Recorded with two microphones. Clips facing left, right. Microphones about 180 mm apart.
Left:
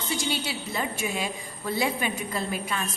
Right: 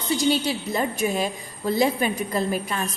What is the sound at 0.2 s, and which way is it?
A woman's voice, 40° right (ahead or behind).